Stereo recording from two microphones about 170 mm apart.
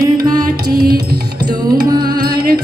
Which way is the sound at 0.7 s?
60° right (ahead or behind).